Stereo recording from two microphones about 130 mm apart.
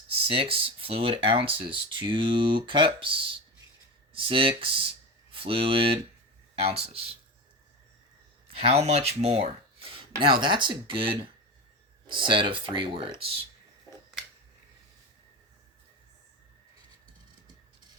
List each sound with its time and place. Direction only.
0.1 s speech: 45° right (ahead or behind)
8.5 s speech: 50° right (ahead or behind)
10.0 s speech: 40° right (ahead or behind)